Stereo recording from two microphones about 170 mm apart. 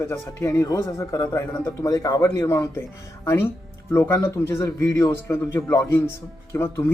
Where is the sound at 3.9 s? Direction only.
15° left (ahead or behind).